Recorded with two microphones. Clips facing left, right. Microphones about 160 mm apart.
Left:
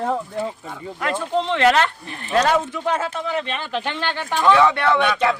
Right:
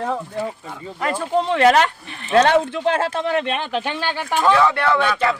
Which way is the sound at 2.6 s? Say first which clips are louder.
Right 3 dB; 75° right (ahead or behind).